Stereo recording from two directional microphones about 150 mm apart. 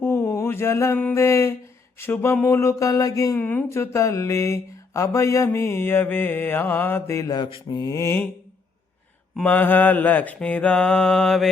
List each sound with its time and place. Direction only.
0.0 s mantra: 15° left (ahead or behind)
3.4 s mantra: 10° left (ahead or behind)
9.4 s mantra: 10° left (ahead or behind)